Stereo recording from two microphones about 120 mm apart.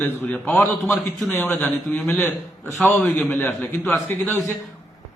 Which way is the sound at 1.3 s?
15° left (ahead or behind).